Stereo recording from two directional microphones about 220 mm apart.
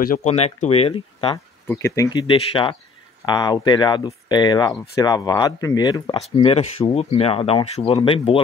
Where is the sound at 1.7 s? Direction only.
10° left (ahead or behind).